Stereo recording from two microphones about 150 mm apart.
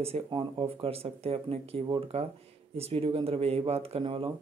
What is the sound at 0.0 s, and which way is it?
Speech, 35° right (ahead or behind).